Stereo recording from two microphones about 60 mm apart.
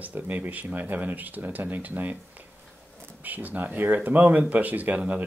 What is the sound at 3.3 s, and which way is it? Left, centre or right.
Speech, right.